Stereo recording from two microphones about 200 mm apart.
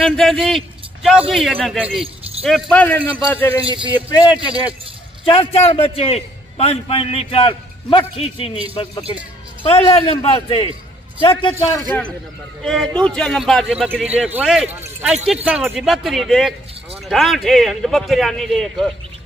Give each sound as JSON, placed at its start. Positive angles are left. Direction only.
{"t": 0.0, "sound": "a man's voice", "side_deg": 0}
{"t": 3.6, "sound": "speech", "side_deg": -25}
{"t": 3.9, "sound": "a man's voice", "side_deg": 20}
{"t": 12.6, "sound": "a man's voice", "side_deg": 0}